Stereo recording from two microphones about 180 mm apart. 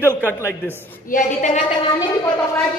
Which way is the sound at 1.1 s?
45° left (ahead or behind).